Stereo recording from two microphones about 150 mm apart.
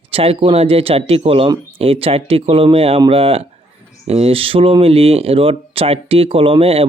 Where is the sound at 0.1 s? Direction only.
40° right (ahead or behind).